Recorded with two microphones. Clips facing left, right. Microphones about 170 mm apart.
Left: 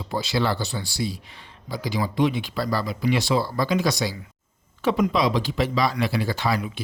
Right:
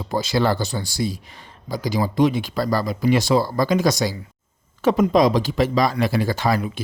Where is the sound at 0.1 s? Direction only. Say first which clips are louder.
Right 4 dB; 45° right (ahead or behind).